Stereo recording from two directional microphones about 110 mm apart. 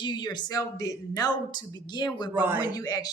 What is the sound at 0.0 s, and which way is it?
A woman's voice, 40° left (ahead or behind).